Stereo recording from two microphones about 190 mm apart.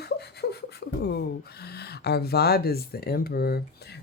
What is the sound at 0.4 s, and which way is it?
Beatboxing, 60° left (ahead or behind).